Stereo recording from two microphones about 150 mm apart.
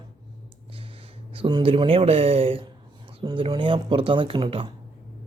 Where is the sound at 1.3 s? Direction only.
35° right (ahead or behind).